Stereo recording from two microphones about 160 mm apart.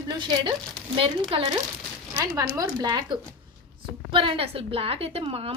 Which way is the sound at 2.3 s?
20° right (ahead or behind).